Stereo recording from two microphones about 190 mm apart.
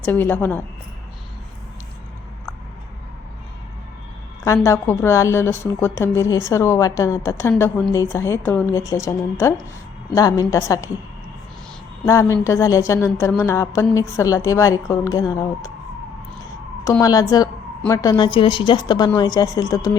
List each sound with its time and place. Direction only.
0.0 s a woman's voice: 10° left (ahead or behind)
4.4 s a woman's voice: 15° left (ahead or behind)
12.3 s a woman's voice: 15° left (ahead or behind)
17.0 s a woman's voice: 20° left (ahead or behind)